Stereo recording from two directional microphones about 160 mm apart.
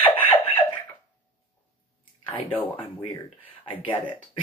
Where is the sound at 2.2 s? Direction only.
10° left (ahead or behind).